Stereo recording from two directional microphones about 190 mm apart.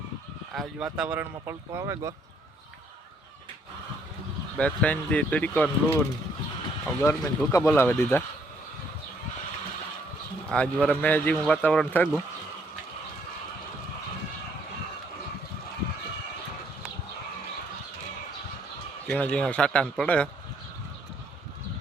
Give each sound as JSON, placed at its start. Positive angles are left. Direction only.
{"t": 0.5, "sound": "speech", "side_deg": 0}
{"t": 4.5, "sound": "speech", "side_deg": 5}
{"t": 7.0, "sound": "speech", "side_deg": 15}
{"t": 10.5, "sound": "speech", "side_deg": 5}
{"t": 19.0, "sound": "a man's voice", "side_deg": 5}